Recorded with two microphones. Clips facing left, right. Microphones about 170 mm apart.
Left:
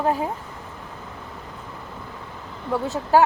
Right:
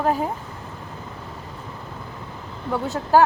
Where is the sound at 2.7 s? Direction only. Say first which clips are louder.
Right 1 dB; 5° left (ahead or behind).